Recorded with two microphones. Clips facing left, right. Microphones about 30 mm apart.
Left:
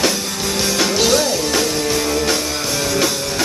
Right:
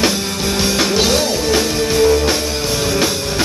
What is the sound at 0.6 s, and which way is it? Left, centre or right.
Music, centre.